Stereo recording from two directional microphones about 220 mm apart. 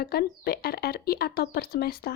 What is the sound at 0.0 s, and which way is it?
Speech, 45° left (ahead or behind).